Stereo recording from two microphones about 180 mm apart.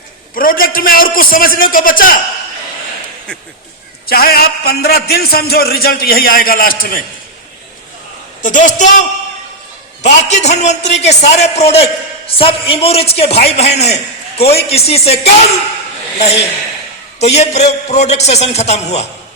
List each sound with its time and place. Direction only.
0.3 s a man's voice: 50° left (ahead or behind)
4.0 s a man's voice: 55° left (ahead or behind)
8.4 s a man's voice: 45° left (ahead or behind)